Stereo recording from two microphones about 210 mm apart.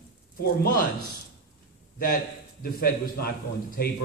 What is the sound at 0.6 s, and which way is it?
Speech, 45° left (ahead or behind).